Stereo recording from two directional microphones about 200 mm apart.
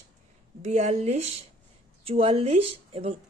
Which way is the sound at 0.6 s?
35° right (ahead or behind).